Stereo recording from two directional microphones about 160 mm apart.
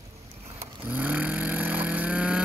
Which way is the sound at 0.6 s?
10° right (ahead or behind).